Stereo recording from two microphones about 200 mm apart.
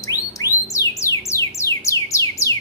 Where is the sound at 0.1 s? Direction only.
15° left (ahead or behind).